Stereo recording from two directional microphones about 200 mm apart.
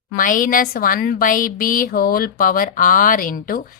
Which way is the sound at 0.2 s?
40° left (ahead or behind).